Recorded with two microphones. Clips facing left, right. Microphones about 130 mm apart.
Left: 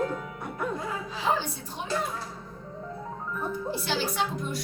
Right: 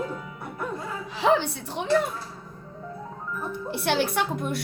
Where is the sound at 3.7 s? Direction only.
60° right (ahead or behind).